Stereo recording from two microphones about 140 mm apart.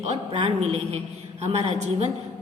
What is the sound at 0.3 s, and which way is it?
A woman's voice, 50° right (ahead or behind).